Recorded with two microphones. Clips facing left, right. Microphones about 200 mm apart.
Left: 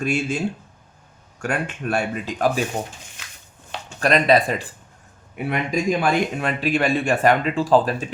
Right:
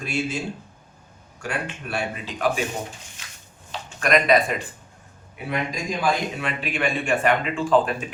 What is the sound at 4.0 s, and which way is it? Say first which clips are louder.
Speech: left 2 dB; 30° left (ahead or behind).